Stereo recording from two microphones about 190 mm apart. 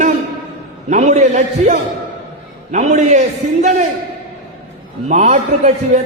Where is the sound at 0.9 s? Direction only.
40° right (ahead or behind).